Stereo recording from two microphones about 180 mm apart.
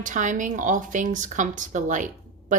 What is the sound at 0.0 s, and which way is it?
A woman's voice, 45° right (ahead or behind).